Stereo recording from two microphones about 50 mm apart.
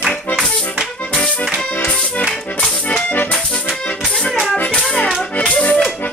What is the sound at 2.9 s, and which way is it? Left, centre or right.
Accordion, left.